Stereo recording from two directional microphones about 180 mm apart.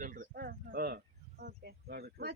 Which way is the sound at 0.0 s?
50° right (ahead or behind).